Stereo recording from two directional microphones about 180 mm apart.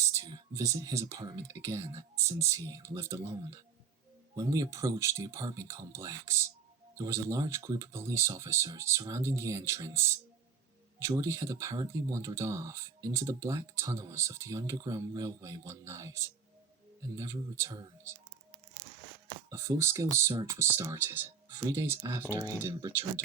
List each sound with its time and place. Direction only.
0.0 s speech: 15° right (ahead or behind)
19.5 s speech: 15° right (ahead or behind)